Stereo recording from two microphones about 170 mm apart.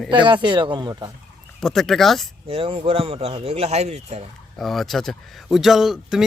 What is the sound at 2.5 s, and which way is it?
Speech, 35° right (ahead or behind).